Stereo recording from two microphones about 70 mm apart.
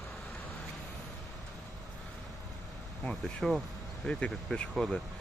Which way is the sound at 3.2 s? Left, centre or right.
Centre.